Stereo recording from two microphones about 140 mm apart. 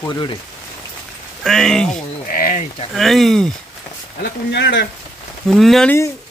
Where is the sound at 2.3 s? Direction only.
90° left.